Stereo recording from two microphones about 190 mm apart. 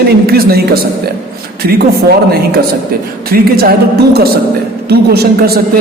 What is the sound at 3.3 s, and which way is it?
A woman's voice, 55° right (ahead or behind).